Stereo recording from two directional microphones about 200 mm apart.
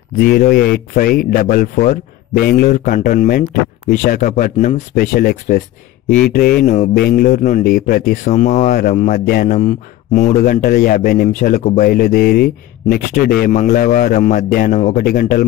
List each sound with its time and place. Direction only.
0.2 s a man's voice: 50° left (ahead or behind)